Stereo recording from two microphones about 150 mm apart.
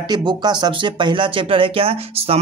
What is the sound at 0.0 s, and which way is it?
Speech, 30° right (ahead or behind).